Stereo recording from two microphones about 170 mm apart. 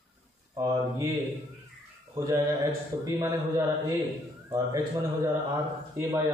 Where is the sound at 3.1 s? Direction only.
20° right (ahead or behind).